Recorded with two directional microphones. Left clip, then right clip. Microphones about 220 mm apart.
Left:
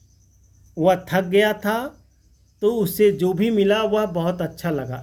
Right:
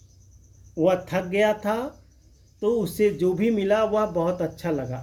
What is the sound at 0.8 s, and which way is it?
Speech, 45° left (ahead or behind).